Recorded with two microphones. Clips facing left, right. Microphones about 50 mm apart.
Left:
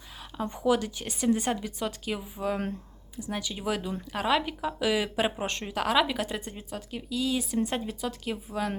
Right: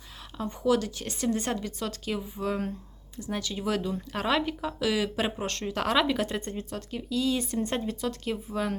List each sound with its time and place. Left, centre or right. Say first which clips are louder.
0.5 s speech: right 1 dB; centre
5.7 s speech: even; centre